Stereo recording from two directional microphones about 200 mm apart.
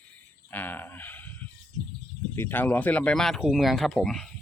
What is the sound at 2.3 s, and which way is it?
Speech, 10° left (ahead or behind).